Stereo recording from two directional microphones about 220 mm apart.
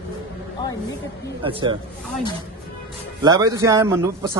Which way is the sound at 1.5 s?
25° right (ahead or behind).